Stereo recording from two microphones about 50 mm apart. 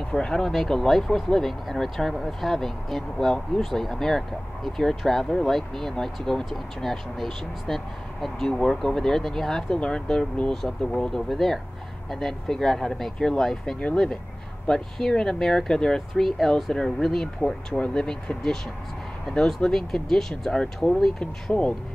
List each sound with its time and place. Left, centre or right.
0.1 s speech: centre